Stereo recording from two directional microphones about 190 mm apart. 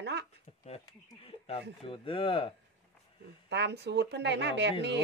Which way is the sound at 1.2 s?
30° left (ahead or behind).